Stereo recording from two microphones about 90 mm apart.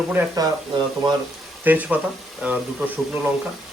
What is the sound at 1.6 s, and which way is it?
Speech, 20° right (ahead or behind).